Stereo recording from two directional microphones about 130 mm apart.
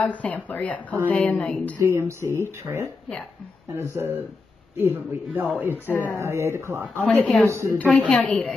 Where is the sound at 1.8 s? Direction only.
20° right (ahead or behind).